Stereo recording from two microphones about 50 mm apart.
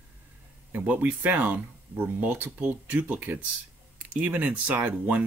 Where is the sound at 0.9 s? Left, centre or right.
Right.